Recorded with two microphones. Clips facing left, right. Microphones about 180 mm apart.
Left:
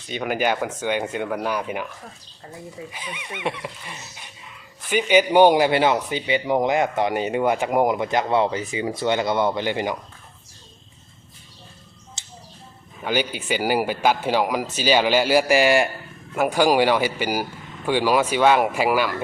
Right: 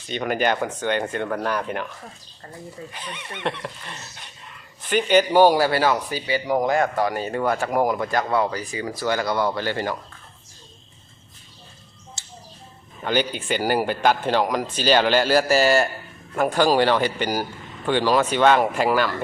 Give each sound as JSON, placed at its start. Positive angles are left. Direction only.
{"t": 0.1, "sound": "speech", "side_deg": 5}
{"t": 12.2, "sound": "a sound", "side_deg": 20}
{"t": 13.0, "sound": "speech", "side_deg": 10}